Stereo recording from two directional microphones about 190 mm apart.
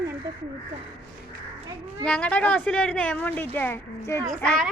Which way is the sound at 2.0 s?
5° left (ahead or behind).